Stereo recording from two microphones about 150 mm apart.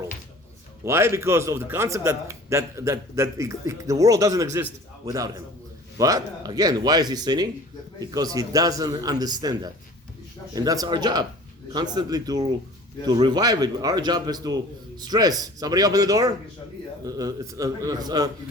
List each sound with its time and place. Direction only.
0.9 s a man's voice: 15° right (ahead or behind)